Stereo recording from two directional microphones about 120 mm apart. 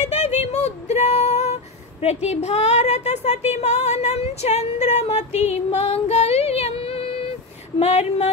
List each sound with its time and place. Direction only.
0.0 s music: 70° left (ahead or behind); by 7.1 s 55° left (ahead or behind)
7.8 s speech: 70° left (ahead or behind)